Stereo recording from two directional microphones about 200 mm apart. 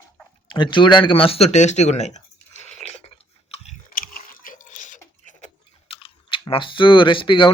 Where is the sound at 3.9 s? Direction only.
45° left (ahead or behind).